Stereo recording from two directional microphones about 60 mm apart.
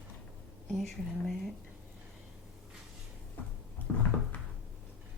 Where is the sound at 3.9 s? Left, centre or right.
Left.